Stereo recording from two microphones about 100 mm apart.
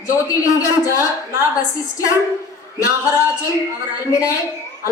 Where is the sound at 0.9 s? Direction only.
30° left (ahead or behind).